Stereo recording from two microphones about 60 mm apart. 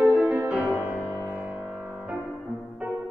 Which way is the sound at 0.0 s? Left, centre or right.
Right.